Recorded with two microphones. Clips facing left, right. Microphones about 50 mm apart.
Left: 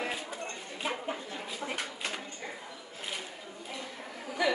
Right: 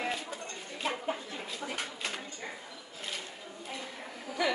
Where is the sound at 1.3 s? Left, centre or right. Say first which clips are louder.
Left 1 dB; centre.